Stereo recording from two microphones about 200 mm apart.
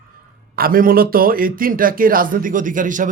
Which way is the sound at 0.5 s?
45° right (ahead or behind).